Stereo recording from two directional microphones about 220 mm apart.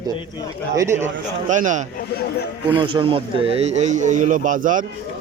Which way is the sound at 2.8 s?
20° right (ahead or behind).